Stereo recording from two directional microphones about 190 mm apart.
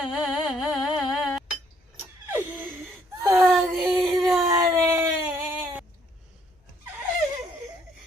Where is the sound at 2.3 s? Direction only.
10° right (ahead or behind).